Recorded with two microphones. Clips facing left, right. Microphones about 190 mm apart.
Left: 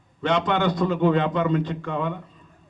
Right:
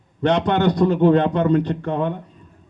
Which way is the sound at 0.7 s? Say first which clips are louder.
Right 7 dB; 65° right (ahead or behind).